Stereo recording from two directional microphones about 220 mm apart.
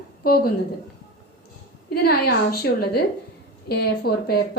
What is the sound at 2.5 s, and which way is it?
A woman's voice, 45° left (ahead or behind).